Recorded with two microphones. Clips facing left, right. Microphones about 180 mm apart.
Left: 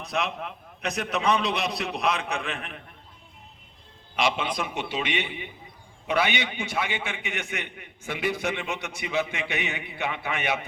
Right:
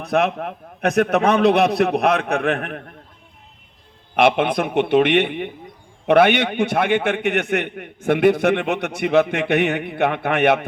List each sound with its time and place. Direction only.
0.0 s a man's voice: 60° right (ahead or behind)
4.1 s a man's voice: 60° right (ahead or behind)